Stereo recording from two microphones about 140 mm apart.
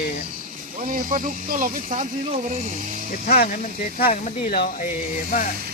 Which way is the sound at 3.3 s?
80° left.